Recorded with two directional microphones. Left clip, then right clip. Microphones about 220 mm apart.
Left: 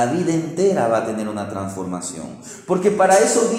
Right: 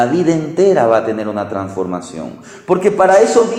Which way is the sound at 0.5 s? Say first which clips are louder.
Right 7 dB; 20° right (ahead or behind).